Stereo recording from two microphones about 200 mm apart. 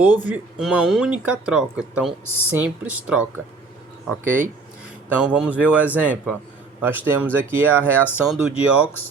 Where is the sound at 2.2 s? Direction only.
90° right.